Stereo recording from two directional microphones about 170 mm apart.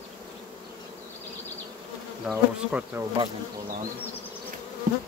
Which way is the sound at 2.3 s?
5° right (ahead or behind).